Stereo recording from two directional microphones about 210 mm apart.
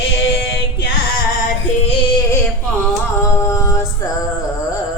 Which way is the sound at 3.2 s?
15° left (ahead or behind).